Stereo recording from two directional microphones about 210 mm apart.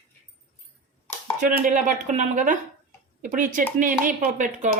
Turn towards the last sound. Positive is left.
turn(degrees=-40)  # may be behind; listen again after turning